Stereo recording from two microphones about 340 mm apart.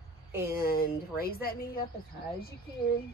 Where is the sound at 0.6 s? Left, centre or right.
Left.